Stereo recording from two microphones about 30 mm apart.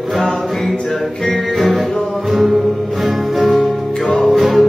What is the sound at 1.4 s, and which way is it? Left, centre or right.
Music, centre.